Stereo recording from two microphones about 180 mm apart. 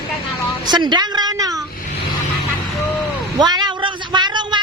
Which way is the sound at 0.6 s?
25° right (ahead or behind).